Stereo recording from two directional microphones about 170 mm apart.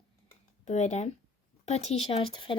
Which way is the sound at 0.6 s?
45° left (ahead or behind).